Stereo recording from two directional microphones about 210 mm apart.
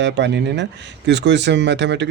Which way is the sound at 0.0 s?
55° right (ahead or behind).